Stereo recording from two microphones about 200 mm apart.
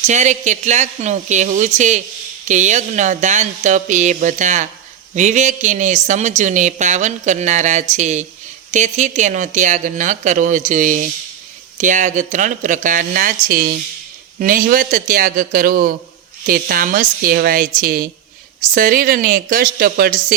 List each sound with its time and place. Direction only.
0.0 s a man's voice: 35° right (ahead or behind)